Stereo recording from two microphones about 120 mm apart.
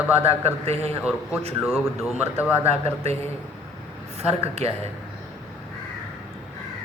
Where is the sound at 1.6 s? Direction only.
Centre (ahead or behind).